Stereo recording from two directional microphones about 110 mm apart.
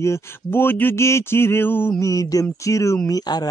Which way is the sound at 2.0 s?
30° left (ahead or behind).